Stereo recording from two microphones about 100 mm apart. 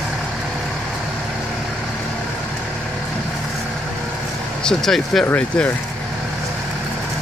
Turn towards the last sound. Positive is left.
turn(degrees=15)  # may be behind; listen again after turning